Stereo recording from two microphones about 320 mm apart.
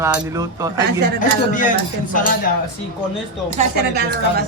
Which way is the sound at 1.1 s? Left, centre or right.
Left.